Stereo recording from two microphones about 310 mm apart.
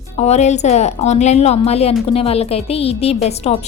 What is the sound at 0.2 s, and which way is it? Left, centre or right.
A woman's voice, left.